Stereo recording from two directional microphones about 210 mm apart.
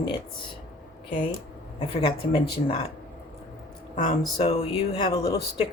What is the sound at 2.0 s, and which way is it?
Speech, 25° left (ahead or behind).